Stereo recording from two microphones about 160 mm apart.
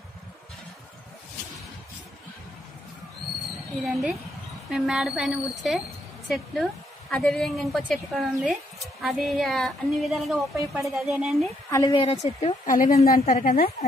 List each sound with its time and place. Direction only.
3.8 s a woman's voice: centre (ahead or behind)
11.7 s a woman's voice: 25° left (ahead or behind); by 13.8 s 50° left (ahead or behind)